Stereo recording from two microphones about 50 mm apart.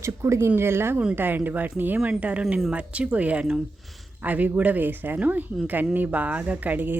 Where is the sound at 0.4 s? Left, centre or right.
Right.